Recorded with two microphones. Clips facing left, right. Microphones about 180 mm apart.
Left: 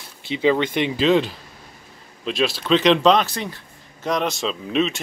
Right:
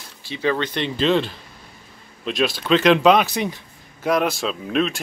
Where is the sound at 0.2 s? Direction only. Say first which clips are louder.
Left 4 dB; 20° left (ahead or behind).